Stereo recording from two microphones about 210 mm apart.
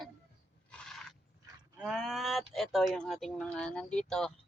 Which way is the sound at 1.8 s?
Centre (ahead or behind).